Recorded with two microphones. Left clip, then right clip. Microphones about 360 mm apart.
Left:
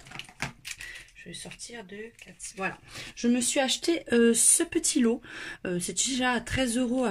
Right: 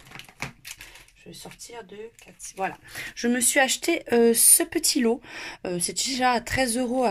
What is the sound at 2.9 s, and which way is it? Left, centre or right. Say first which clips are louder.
Speech: right 2 dB; centre.